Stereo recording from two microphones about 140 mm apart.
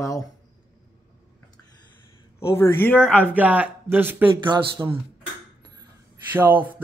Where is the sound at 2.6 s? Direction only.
15° left (ahead or behind).